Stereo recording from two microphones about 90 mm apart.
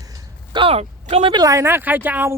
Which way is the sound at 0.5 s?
90° right.